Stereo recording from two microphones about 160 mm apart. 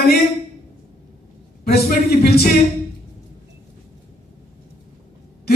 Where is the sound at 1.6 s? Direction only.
75° left (ahead or behind).